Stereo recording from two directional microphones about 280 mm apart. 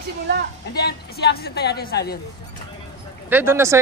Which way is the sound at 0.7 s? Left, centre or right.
Left.